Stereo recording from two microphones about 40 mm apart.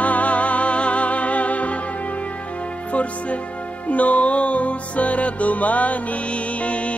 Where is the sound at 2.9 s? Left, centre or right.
Left.